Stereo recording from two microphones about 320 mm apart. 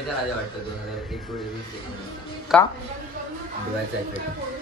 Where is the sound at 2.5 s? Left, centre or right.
Centre.